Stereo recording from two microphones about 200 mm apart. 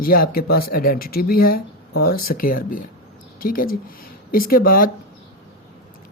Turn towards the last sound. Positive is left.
turn(degrees=45)  # may be behind; listen again after turning